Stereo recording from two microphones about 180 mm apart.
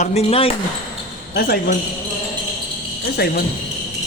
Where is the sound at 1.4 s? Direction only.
55° left (ahead or behind).